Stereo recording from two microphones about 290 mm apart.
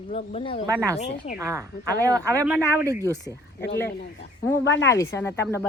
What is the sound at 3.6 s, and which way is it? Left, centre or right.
Speech, left.